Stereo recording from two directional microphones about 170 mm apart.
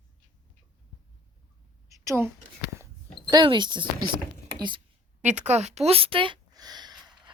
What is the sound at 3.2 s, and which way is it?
Speech, 25° right (ahead or behind).